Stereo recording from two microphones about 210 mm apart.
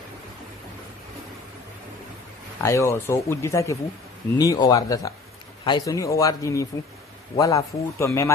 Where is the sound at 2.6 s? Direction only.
15° left (ahead or behind).